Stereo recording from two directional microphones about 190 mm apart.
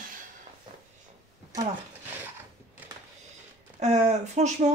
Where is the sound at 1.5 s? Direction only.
20° right (ahead or behind).